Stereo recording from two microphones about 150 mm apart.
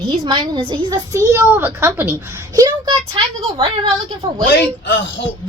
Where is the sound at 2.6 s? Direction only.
30° right (ahead or behind).